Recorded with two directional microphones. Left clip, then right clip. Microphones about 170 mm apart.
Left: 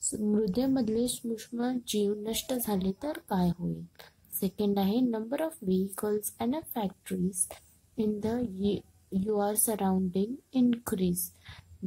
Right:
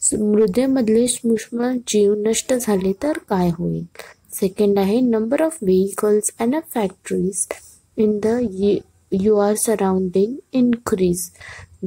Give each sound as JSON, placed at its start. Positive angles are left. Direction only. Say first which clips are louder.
{"t": 0.2, "sound": "a woman's voice", "louder": "right 13 dB", "side_deg": -30}